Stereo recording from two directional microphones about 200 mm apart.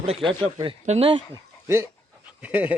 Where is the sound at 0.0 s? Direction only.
30° right (ahead or behind).